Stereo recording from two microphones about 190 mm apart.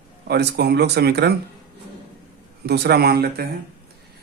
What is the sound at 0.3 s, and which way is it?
Speech, 60° right (ahead or behind).